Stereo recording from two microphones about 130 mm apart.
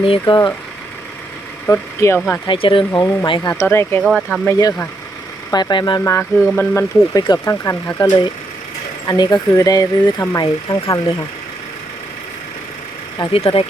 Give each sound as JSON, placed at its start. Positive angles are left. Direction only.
{"t": 0.0, "sound": "speech", "side_deg": 45}
{"t": 1.6, "sound": "speech", "side_deg": 20}
{"t": 2.5, "sound": "speech", "side_deg": 40}
{"t": 3.5, "sound": "speech", "side_deg": 20}
{"t": 4.0, "sound": "speech", "side_deg": 0}
{"t": 4.4, "sound": "speech", "side_deg": 20}
{"t": 6.1, "sound": "speech", "side_deg": 20}
{"t": 9.0, "sound": "speech", "side_deg": 30}
{"t": 13.3, "sound": "speech", "side_deg": 45}